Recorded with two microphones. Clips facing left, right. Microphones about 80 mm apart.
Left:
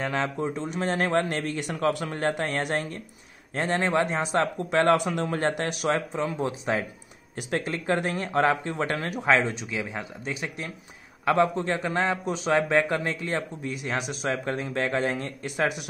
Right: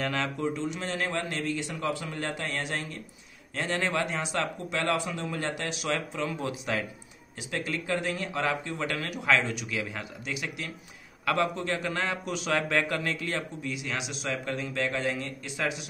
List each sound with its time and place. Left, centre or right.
0.0 s speech: left
2.1 s speech: left
5.9 s a man's voice: left
7.5 s a man's voice: left
13.7 s speech: left